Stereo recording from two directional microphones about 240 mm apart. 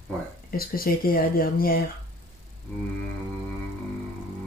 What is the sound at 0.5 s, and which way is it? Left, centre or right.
Speech, left.